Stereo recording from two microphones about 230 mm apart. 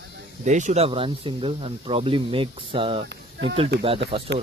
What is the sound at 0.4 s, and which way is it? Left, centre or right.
Speech, right.